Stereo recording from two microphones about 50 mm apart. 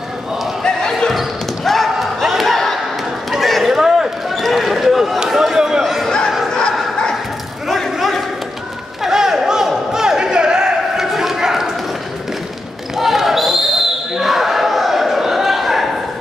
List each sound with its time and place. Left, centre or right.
0.9 s basketball bounce: centre
3.3 s a sound: centre
3.7 s basketball bounce: centre
4.3 s basketball bounce: centre
5.2 s a sound: centre
6.0 s music: centre
6.5 s bow-wow: centre
9.0 s a sound: centre
12.9 s basketball bounce: centre